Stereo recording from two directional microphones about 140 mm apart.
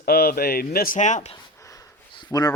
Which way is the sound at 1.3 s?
25° left (ahead or behind).